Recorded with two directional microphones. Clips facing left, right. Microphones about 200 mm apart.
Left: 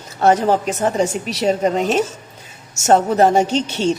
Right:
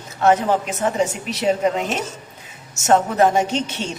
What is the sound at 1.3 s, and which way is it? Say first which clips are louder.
Speech: left 2 dB; 40° left (ahead or behind).